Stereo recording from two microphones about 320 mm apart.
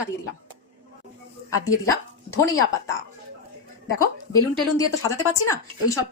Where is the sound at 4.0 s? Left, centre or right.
Centre.